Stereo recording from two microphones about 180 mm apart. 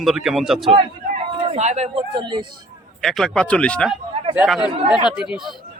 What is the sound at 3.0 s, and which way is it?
A man's voice, centre (ahead or behind).